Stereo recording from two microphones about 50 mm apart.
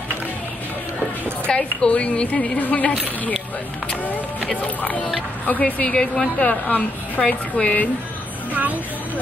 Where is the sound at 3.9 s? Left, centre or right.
Left.